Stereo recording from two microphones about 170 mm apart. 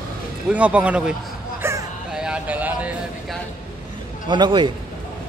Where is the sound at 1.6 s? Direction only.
15° right (ahead or behind).